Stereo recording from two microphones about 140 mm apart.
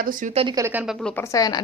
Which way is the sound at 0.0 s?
75° right (ahead or behind).